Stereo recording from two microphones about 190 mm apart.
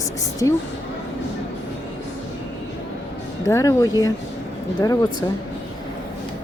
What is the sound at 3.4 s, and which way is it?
Speech, 15° left (ahead or behind).